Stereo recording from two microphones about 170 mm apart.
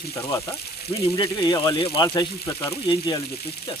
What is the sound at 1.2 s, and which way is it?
Speech, 25° left (ahead or behind).